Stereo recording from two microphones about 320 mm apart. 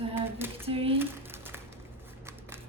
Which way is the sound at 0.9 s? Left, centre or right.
Centre.